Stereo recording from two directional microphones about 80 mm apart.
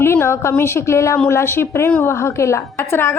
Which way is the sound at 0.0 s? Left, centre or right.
Left.